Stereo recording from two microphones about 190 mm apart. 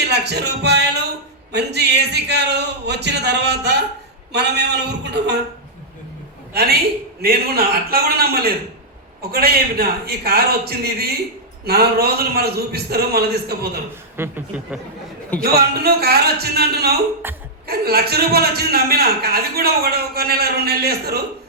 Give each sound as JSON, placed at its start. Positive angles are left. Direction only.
{"t": 0.0, "sound": "a man's voice", "side_deg": -60}
{"t": 6.5, "sound": "a woman's voice", "side_deg": -55}
{"t": 14.2, "sound": "a man's voice", "side_deg": -10}
{"t": 15.4, "sound": "a man's voice", "side_deg": -55}
{"t": 17.2, "sound": "a man's voice", "side_deg": -10}
{"t": 17.7, "sound": "a man's voice", "side_deg": -55}